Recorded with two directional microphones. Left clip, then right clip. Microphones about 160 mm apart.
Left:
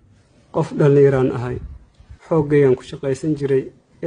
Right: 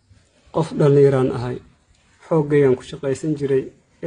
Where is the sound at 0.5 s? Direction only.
10° left (ahead or behind).